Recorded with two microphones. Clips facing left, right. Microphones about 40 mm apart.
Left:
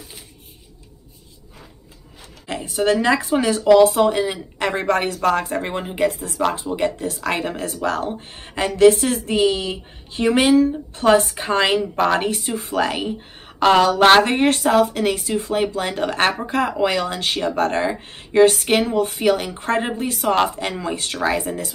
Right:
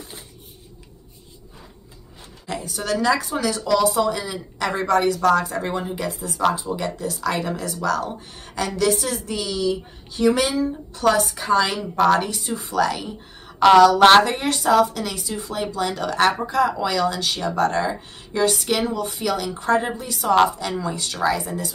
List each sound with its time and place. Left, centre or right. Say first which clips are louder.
2.4 s a woman's voice: left 7 dB; left